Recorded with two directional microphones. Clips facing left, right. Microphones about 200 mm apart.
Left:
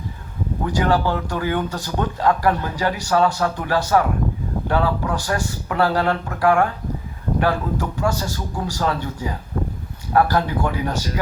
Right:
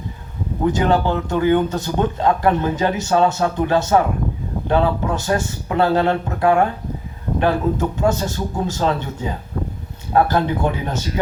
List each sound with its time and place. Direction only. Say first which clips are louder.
0.6 s speech: right 3 dB; 20° right (ahead or behind)